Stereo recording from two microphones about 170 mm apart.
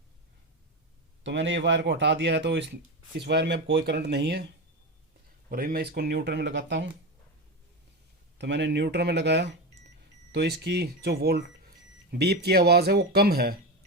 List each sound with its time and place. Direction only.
1.2 s speech: 90° right
5.5 s speech: 60° right (ahead or behind); by 6.9 s 90° right
8.4 s speech: 90° right
10.3 s speech: 75° right (ahead or behind)